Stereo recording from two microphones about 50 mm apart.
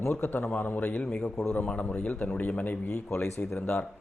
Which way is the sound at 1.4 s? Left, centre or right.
Left.